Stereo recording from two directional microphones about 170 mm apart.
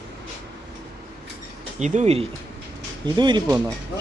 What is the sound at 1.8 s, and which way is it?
Speech, 45° right (ahead or behind).